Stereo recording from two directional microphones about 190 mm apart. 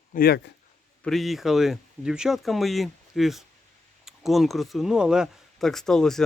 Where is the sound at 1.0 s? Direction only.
Centre (ahead or behind).